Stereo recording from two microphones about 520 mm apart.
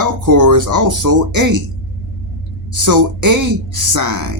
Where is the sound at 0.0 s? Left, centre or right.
Right.